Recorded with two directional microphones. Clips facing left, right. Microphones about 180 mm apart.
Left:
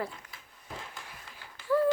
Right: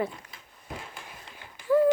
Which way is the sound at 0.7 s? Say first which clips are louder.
Right 2 dB; 15° right (ahead or behind).